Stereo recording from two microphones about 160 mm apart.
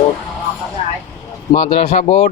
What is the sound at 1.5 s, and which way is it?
Speech, 35° left (ahead or behind).